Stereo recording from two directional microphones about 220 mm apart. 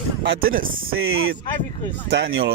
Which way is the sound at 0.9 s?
65° right (ahead or behind).